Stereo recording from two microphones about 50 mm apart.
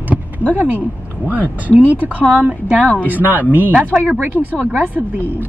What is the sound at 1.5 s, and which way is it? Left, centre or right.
Speech, right.